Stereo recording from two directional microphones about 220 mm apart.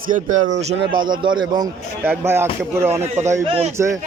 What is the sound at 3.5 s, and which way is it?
Speech, 25° right (ahead or behind).